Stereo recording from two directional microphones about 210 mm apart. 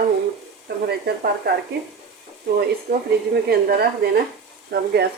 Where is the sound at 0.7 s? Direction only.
50° right (ahead or behind).